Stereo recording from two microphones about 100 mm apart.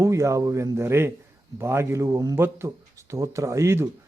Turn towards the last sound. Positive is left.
turn(degrees=-25)  # may be behind; listen again after turning